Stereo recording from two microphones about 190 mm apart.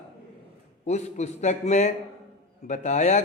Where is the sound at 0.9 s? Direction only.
35° left (ahead or behind).